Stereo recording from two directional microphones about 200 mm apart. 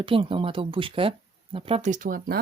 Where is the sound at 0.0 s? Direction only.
25° right (ahead or behind).